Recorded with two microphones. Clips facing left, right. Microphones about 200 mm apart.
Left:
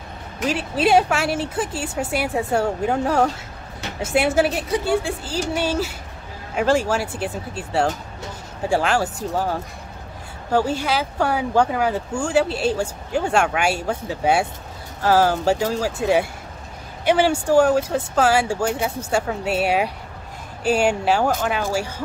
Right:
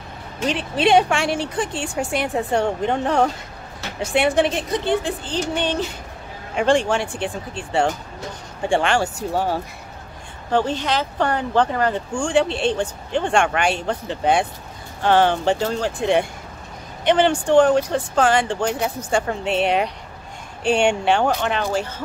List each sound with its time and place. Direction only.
0.5 s speech: 5° left (ahead or behind)